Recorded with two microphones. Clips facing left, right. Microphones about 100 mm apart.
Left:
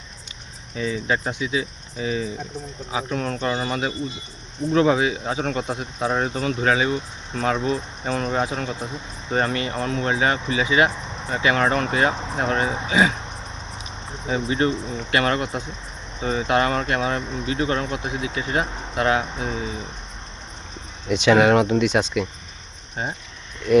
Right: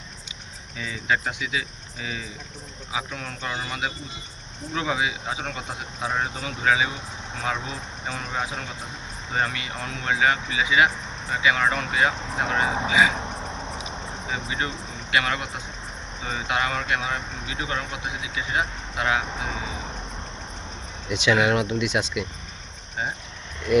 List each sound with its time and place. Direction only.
0.8 s speech: 40° left (ahead or behind)
13.8 s a sound: 40° left (ahead or behind)
15.1 s speech: 45° left (ahead or behind)
21.1 s speech: 40° left (ahead or behind)